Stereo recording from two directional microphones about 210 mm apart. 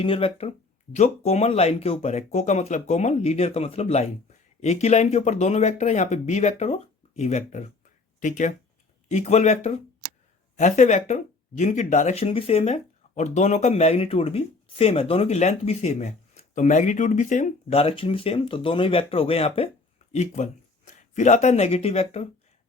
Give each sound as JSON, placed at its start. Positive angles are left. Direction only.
{"t": 0.0, "sound": "speech", "side_deg": 25}